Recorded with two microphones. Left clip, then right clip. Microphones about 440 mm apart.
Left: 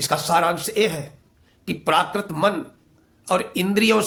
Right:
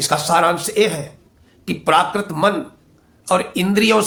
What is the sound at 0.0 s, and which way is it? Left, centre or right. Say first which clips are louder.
Speech: right 4 dB; left.